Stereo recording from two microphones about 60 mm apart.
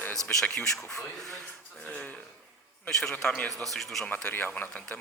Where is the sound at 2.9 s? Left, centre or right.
Centre.